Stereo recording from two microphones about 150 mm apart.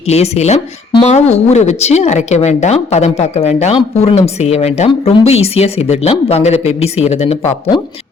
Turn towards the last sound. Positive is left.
turn(degrees=40)  # may be behind; listen again after turning